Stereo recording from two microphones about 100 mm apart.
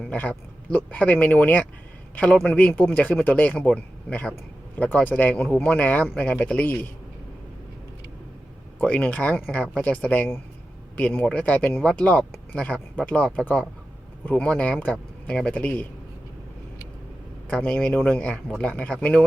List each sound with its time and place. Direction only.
0.0 s speech: 15° left (ahead or behind)
8.8 s speech: 15° left (ahead or behind)
17.5 s speech: 10° left (ahead or behind)